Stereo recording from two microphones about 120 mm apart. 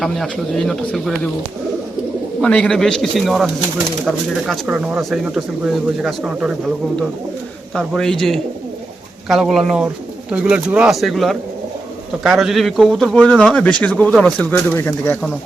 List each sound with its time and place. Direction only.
0.0 s speech: centre (ahead or behind)
2.4 s speech: 5° left (ahead or behind)
7.7 s speech: 5° left (ahead or behind)
14.3 s speech: 10° left (ahead or behind)